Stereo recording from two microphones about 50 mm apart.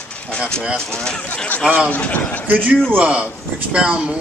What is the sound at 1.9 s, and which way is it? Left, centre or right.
Speech, left.